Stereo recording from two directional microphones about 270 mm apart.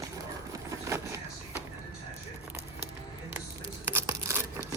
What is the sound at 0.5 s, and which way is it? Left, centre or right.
Vehicle, centre.